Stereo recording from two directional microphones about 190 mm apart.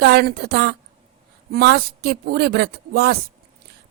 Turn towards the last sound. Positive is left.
turn(degrees=-60)  # may be behind; listen again after turning